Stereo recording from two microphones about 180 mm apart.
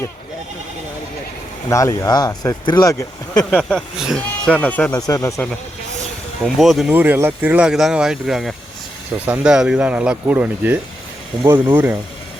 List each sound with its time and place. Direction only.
1.7 s speech: 15° left (ahead or behind)
3.5 s speech: centre (ahead or behind)
4.9 s speech: 20° left (ahead or behind)
6.4 s speech: centre (ahead or behind)